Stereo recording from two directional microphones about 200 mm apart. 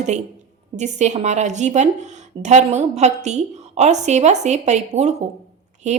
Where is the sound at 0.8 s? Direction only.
35° right (ahead or behind).